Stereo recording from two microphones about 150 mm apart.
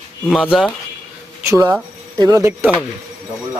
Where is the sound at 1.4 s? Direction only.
20° right (ahead or behind).